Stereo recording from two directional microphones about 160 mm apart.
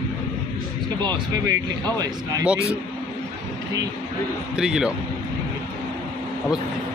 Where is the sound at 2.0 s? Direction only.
20° right (ahead or behind).